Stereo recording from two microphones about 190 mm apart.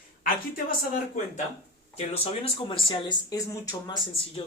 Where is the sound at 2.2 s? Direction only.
30° left (ahead or behind).